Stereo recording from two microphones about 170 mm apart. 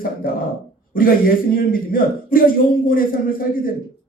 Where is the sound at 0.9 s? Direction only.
55° left (ahead or behind).